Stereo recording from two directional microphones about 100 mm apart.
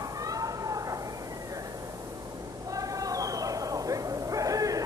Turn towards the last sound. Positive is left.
turn(degrees=-35)  # may be behind; listen again after turning